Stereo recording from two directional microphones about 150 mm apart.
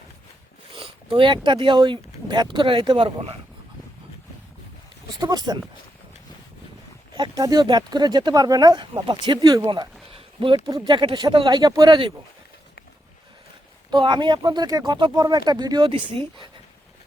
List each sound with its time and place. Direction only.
0.7 s speech: 35° right (ahead or behind)
5.2 s speech: 25° right (ahead or behind)
7.2 s speech: 25° right (ahead or behind)
10.1 s a sound: 40° right (ahead or behind)
10.7 s speech: 25° right (ahead or behind)
13.9 s speech: 30° right (ahead or behind)